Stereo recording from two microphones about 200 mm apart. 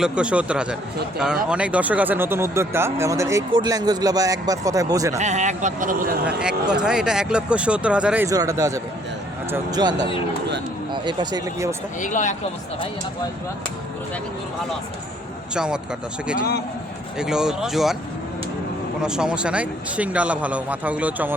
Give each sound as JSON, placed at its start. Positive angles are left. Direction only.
{"t": 0.0, "sound": "speech", "side_deg": -5}
{"t": 5.1, "sound": "speech", "side_deg": -35}
{"t": 6.2, "sound": "speech", "side_deg": -5}
{"t": 10.9, "sound": "speech", "side_deg": -20}
{"t": 11.9, "sound": "speech", "side_deg": 40}
{"t": 15.5, "sound": "speech", "side_deg": -5}
{"t": 17.2, "sound": "speech", "side_deg": -5}
{"t": 19.0, "sound": "speech", "side_deg": -5}